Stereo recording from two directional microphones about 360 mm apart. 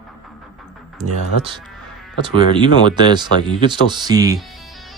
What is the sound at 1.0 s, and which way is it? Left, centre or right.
Speech, centre.